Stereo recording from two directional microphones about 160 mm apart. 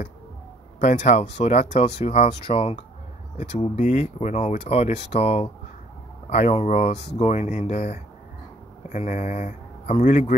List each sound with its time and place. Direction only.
0.7 s speech: 50° left (ahead or behind)